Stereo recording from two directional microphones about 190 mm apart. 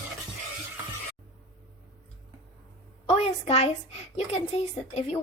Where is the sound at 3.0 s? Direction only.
35° left (ahead or behind).